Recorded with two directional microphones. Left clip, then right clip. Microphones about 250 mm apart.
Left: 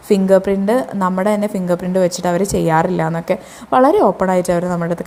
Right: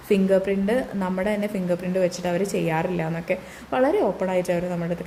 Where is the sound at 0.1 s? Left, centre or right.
Centre.